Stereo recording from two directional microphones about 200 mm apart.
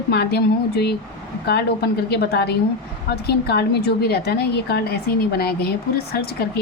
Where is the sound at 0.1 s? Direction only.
55° left (ahead or behind).